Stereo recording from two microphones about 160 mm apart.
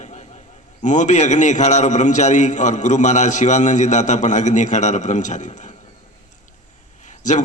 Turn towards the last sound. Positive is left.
turn(degrees=50)  # may be behind; listen again after turning